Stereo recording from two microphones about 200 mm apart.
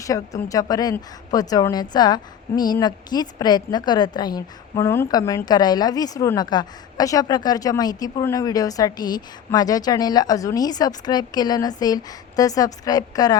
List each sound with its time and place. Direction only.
0.0 s a woman's voice: 15° left (ahead or behind)